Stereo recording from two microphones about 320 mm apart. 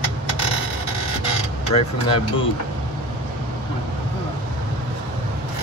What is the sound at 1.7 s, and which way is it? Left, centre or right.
Speech, centre.